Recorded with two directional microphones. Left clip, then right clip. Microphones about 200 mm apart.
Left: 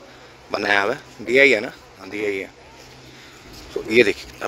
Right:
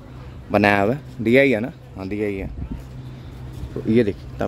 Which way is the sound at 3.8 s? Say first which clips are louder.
Right 1 dB; 35° left (ahead or behind).